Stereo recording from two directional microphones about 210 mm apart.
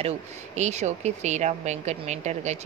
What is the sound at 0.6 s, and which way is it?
Speech, 35° right (ahead or behind).